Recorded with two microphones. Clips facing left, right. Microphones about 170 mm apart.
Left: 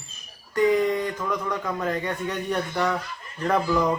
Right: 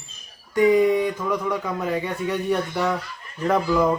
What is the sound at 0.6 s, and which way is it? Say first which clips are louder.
Speech: right 4 dB; 10° right (ahead or behind).